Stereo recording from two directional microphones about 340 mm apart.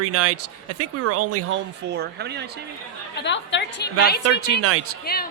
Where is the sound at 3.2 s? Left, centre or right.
Left.